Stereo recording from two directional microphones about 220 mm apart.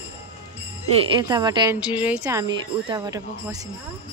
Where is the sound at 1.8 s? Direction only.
5° right (ahead or behind).